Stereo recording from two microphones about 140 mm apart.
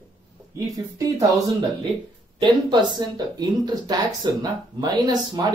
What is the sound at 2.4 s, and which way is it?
Speech, 35° right (ahead or behind).